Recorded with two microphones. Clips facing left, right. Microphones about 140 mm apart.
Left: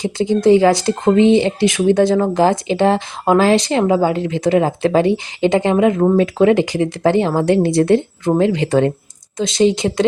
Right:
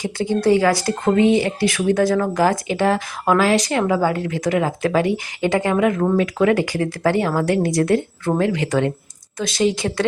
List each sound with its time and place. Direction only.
0.0 s speech: 20° left (ahead or behind)